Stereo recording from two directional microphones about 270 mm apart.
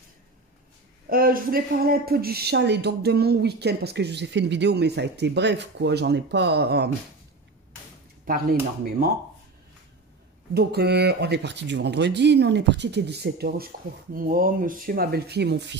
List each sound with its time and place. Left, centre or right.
1.0 s speech: right
8.3 s speech: right
10.5 s speech: right